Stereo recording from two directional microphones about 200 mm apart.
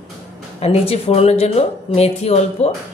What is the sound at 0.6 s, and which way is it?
Speech, 30° left (ahead or behind).